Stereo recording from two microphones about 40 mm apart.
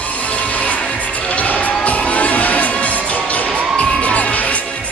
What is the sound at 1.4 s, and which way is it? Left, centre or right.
Music, left.